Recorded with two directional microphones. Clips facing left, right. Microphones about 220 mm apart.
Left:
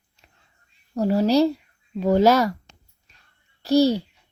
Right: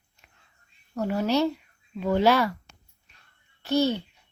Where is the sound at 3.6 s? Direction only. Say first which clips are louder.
Left 6 dB; 35° left (ahead or behind).